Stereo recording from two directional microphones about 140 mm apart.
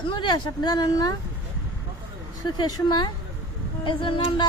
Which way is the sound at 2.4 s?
30° left (ahead or behind).